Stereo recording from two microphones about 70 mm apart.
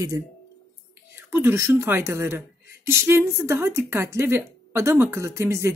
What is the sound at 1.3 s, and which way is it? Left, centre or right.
Speech, right.